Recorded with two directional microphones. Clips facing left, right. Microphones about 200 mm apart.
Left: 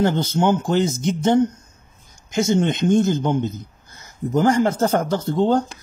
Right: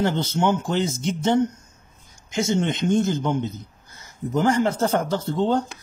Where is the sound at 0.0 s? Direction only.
40° left (ahead or behind).